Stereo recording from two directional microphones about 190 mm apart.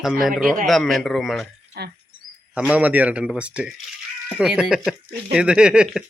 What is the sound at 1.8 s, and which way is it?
Cricket, 55° right (ahead or behind).